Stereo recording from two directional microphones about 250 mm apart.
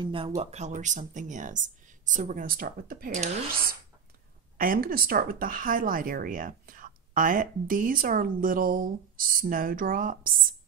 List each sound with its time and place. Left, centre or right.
0.0 s speech: centre